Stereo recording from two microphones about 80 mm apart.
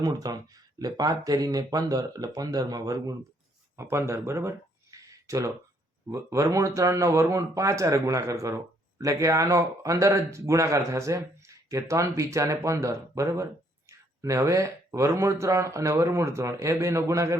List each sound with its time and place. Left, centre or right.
0.0 s speech: right
3.8 s speech: right